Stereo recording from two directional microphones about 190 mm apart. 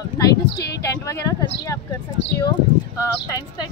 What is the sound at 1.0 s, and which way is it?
Speech, 15° left (ahead or behind).